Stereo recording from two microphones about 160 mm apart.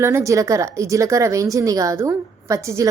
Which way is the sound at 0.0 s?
15° right (ahead or behind).